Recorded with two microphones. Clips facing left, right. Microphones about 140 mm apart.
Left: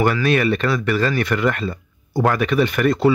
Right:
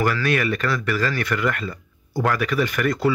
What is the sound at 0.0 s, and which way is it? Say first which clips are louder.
A man's voice: left 4 dB; 25° left (ahead or behind).